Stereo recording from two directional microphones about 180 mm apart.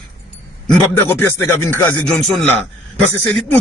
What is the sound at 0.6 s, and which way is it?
A man's voice, 10° left (ahead or behind).